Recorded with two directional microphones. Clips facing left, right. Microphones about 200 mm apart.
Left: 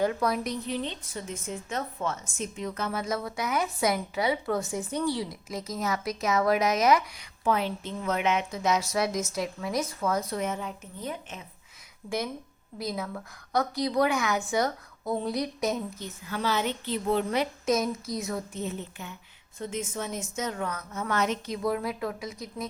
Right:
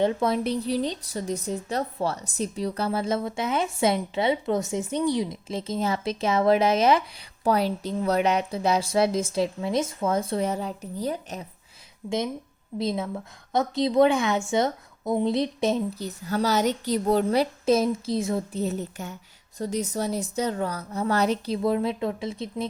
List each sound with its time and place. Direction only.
0.0 s a woman's voice: 25° right (ahead or behind)
12.0 s a woman's voice: 25° right (ahead or behind)